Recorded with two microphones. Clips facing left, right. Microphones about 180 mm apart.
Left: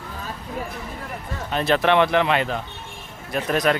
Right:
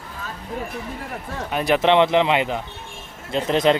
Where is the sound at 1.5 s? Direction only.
10° right (ahead or behind).